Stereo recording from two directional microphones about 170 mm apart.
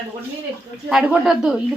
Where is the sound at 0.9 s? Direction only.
5° right (ahead or behind).